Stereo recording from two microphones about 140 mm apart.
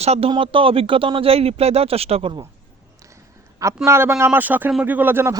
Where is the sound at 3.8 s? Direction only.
20° right (ahead or behind).